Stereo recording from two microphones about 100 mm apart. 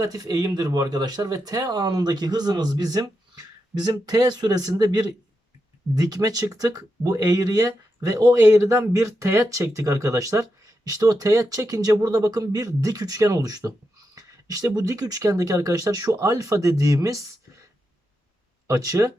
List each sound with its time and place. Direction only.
0.0 s speech: 35° right (ahead or behind)
18.7 s speech: 35° right (ahead or behind)